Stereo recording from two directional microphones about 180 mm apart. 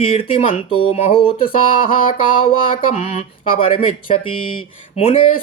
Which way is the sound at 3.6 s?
30° left (ahead or behind).